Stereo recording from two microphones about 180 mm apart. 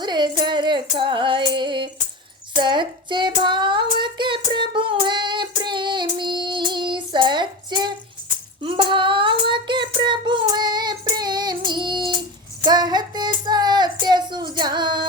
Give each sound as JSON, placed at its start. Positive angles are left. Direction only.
{"t": 0.0, "sound": "music", "side_deg": -25}
{"t": 2.6, "sound": "child singing", "side_deg": -25}
{"t": 12.6, "sound": "female singing", "side_deg": -25}
{"t": 14.0, "sound": "child singing", "side_deg": -25}